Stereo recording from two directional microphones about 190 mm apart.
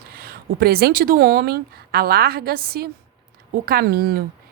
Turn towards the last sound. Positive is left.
turn(degrees=-55)  # may be behind; listen again after turning